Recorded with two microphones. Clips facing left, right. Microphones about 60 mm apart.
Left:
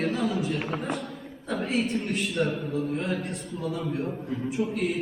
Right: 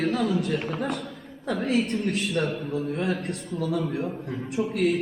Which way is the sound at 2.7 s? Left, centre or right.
Right.